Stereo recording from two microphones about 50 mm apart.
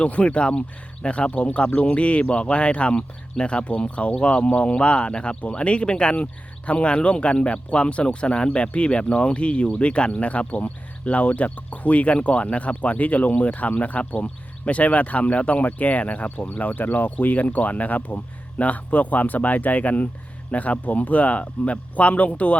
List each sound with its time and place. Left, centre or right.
0.0 s speech: left